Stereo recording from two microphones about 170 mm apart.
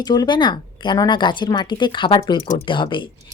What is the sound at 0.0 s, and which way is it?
Speech, 25° left (ahead or behind).